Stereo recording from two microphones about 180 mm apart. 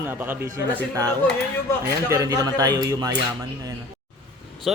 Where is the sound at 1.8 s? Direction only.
15° right (ahead or behind).